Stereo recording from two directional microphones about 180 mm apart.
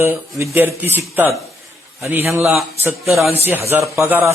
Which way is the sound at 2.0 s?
15° right (ahead or behind).